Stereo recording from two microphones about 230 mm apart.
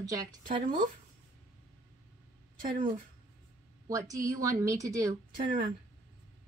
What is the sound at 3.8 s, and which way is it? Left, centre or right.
Speech, centre.